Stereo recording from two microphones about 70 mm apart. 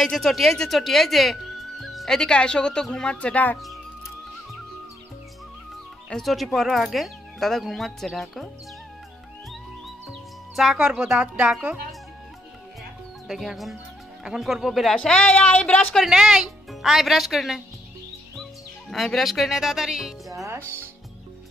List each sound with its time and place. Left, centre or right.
0.0 s speech: centre
6.2 s speech: centre
10.5 s speech: centre
13.3 s speech: centre
15.0 s speech: centre
15.8 s speech: centre
16.1 s speech: centre
18.9 s speech: centre
20.4 s speech: right